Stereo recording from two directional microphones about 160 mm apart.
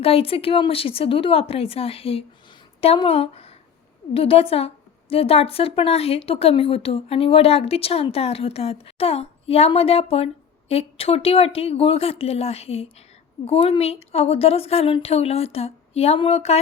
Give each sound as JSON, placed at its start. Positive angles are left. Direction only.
{"t": 0.0, "sound": "a woman's voice", "side_deg": 35}